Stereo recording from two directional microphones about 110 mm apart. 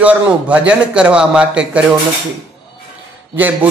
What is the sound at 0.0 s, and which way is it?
Speech, 10° right (ahead or behind).